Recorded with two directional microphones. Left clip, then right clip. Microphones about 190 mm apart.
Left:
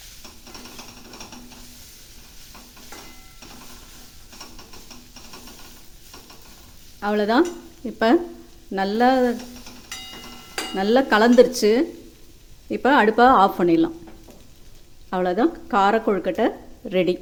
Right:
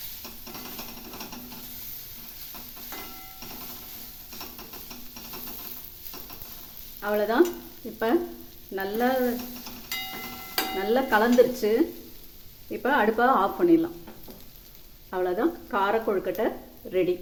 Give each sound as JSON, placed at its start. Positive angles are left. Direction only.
{"t": 7.0, "sound": "stir", "side_deg": 55}
{"t": 7.9, "sound": "speech", "side_deg": 60}
{"t": 10.8, "sound": "speech", "side_deg": 55}
{"t": 15.1, "sound": "speech", "side_deg": 55}